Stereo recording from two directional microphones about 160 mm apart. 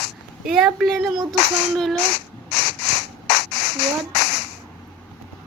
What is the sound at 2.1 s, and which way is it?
Sanding, 90° left.